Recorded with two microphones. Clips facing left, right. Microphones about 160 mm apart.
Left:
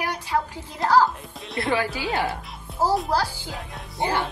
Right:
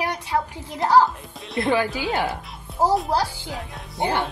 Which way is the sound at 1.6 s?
20° right (ahead or behind).